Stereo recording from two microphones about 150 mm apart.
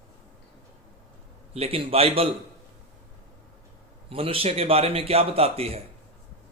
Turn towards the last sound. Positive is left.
turn(degrees=-45)  # may be behind; listen again after turning